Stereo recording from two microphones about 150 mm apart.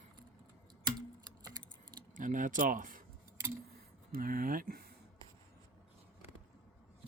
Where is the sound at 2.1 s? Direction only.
60° right (ahead or behind).